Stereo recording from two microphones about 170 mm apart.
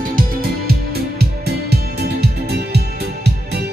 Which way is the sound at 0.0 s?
60° right (ahead or behind).